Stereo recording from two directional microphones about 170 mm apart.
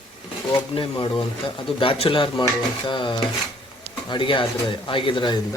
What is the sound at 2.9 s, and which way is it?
Stir, 30° left (ahead or behind).